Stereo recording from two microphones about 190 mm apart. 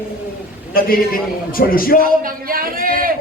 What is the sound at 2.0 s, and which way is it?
Speech, 50° right (ahead or behind).